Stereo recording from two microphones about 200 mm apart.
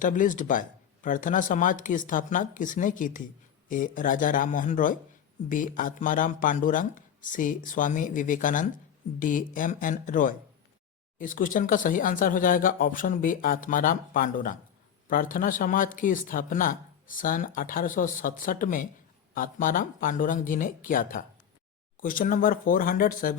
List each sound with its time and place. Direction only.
0.0 s speech: 40° left (ahead or behind)